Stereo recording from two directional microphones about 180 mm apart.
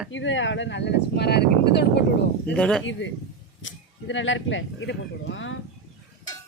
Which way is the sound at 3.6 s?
90° left.